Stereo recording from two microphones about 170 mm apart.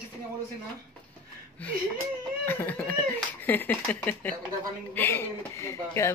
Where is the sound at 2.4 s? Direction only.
10° left (ahead or behind).